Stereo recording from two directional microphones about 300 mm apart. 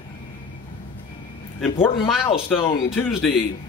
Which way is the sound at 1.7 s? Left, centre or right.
Centre.